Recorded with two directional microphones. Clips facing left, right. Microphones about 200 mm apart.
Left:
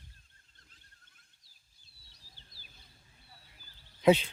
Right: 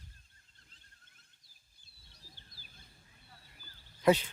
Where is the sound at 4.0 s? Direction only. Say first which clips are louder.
Left 3 dB; 25° left (ahead or behind).